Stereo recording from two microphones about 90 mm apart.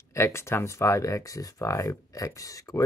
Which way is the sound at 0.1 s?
30° left (ahead or behind).